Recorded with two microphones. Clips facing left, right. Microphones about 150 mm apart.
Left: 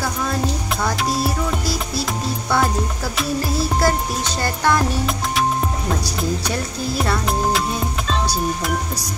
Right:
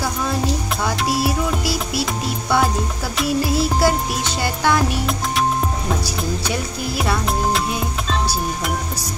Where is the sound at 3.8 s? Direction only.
5° right (ahead or behind).